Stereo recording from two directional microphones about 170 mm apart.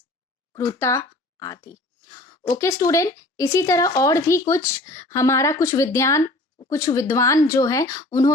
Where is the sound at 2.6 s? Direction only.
15° left (ahead or behind).